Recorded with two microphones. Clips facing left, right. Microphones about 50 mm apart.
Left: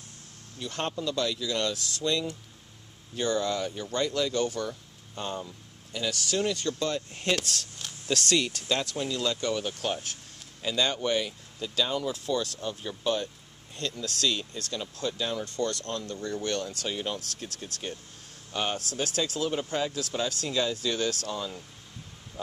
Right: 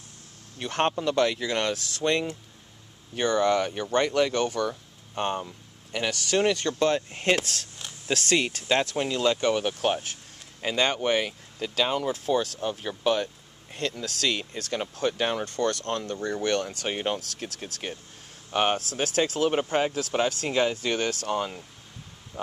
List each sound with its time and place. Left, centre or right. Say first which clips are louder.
0.6 s speech: right 6 dB; right
7.3 s speech: right 3 dB; right
8.6 s speech: right 5 dB; right
12.1 s speech: right 4 dB; centre
21.3 s speech: right 6 dB; right